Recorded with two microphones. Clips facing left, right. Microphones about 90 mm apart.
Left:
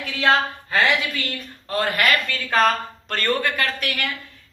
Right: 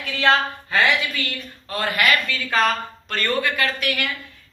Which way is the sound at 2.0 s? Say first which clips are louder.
Right 1 dB; 50° left (ahead or behind).